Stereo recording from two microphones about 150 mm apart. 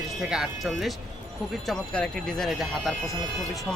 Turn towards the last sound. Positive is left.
turn(degrees=0)  # may be behind; listen again after turning